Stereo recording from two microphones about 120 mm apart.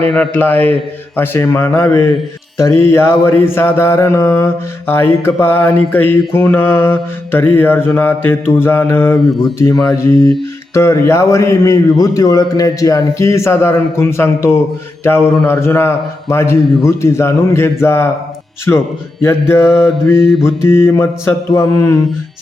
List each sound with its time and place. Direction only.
0.3 s a man's voice: 15° left (ahead or behind)
1.1 s mantra: 20° left (ahead or behind)
19.8 s mantra: centre (ahead or behind)
20.6 s mantra: 20° left (ahead or behind)